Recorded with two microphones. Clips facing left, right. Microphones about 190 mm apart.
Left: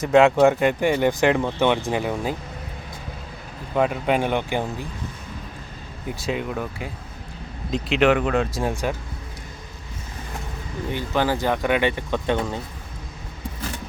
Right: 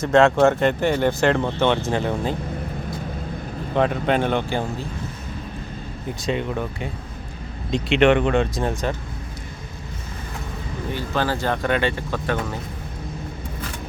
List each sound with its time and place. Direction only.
0.0 s speech: 15° left (ahead or behind)
3.8 s speech: 5° left (ahead or behind)
6.1 s speech: 5° left (ahead or behind)
10.9 s speech: 15° left (ahead or behind)